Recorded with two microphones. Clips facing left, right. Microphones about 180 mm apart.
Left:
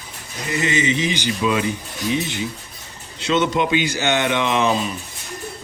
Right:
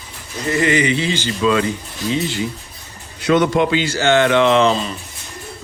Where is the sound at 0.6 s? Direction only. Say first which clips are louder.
Right 3 dB; 20° left (ahead or behind).